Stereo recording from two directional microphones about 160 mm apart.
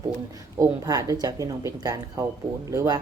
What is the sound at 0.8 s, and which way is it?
Speech, 20° right (ahead or behind).